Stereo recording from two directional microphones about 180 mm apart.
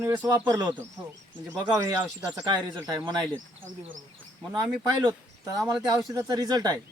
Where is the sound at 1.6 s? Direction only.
20° right (ahead or behind).